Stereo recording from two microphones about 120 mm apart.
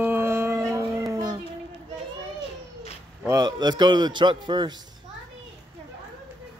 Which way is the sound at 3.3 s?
35° right (ahead or behind).